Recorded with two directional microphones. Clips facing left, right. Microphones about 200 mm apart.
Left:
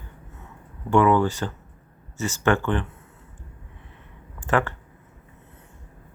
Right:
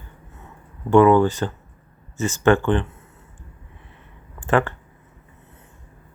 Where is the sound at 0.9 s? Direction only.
35° right (ahead or behind).